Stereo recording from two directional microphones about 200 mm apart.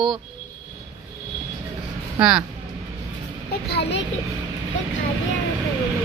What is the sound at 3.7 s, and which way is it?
Speech, 55° left (ahead or behind).